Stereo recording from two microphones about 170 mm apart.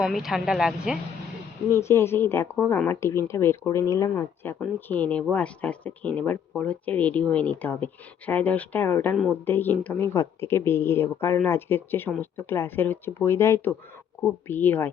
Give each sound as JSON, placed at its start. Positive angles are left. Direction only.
{"t": 0.0, "sound": "speech", "side_deg": 0}
{"t": 1.7, "sound": "a woman's voice", "side_deg": 15}